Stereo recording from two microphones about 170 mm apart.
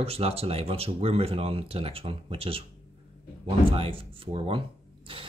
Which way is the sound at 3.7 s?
30° right (ahead or behind).